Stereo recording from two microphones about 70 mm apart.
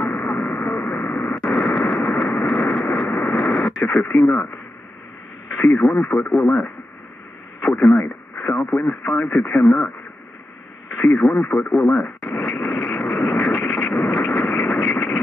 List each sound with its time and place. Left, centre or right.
0.4 s radio: left
1.3 s a sound: centre
2.4 s vehicle: centre
3.1 s radio: centre
3.8 s speech: centre
5.7 s speech: centre
8.0 s speech: centre
11.1 s speech: centre
12.2 s radio: centre
12.5 s a sound: centre